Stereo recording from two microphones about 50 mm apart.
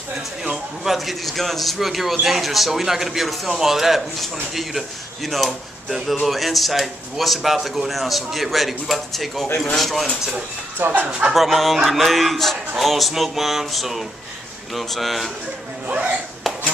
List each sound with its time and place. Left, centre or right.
0.4 s a man's voice: centre
11.1 s speech: right
11.3 s a man's voice: centre
15.9 s speech: right
16.5 s a sound: centre